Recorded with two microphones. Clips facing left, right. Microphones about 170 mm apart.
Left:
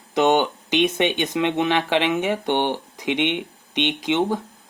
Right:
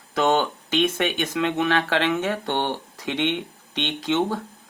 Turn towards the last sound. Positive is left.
turn(degrees=15)  # may be behind; listen again after turning